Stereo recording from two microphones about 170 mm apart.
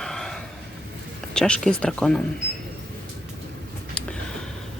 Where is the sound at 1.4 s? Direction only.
5° left (ahead or behind).